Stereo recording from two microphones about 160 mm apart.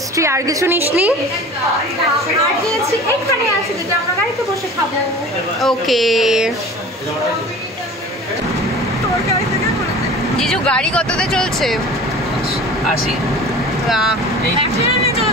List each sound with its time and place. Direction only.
0.1 s a woman's voice: 20° right (ahead or behind)
5.6 s speech: centre (ahead or behind)
10.3 s speech: 5° left (ahead or behind)
13.8 s speech: centre (ahead or behind)